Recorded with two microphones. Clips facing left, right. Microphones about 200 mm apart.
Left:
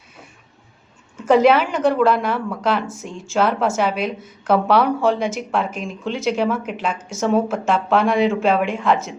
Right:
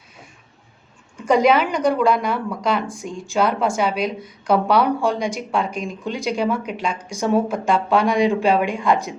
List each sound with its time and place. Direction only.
1.1 s a woman's voice: 5° left (ahead or behind)